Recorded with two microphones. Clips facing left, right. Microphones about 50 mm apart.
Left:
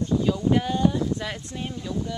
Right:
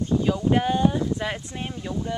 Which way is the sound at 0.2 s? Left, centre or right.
Right.